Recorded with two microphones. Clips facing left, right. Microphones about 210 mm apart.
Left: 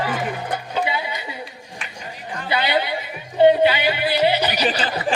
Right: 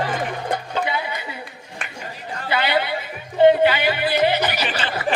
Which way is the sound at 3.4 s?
15° left (ahead or behind).